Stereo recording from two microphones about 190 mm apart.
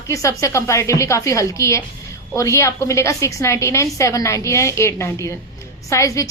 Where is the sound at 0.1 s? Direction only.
15° left (ahead or behind).